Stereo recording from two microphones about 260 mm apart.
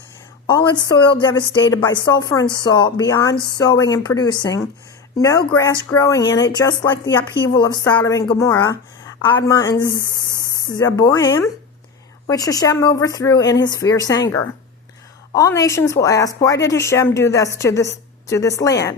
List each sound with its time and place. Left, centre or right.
0.4 s a woman's voice: centre